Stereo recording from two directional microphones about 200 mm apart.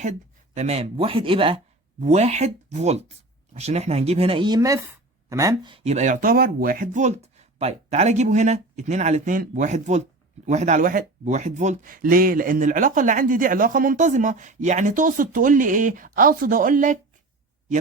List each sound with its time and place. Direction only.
0.5 s speech: 35° right (ahead or behind)